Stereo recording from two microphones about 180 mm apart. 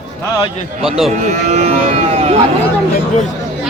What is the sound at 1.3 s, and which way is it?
Speech, 35° right (ahead or behind).